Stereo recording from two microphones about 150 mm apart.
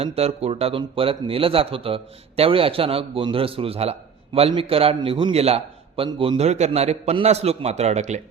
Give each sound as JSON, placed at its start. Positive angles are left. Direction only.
{"t": 0.0, "sound": "a man's voice", "side_deg": -40}